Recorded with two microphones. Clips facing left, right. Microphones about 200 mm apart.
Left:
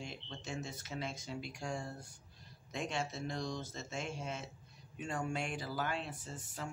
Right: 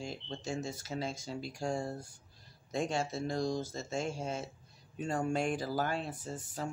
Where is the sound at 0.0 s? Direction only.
35° right (ahead or behind).